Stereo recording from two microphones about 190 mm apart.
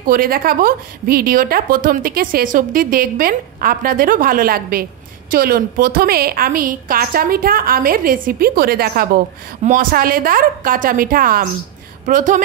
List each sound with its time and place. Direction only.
0.0 s a woman's voice: 50° right (ahead or behind)
9.6 s a woman's voice: 45° right (ahead or behind)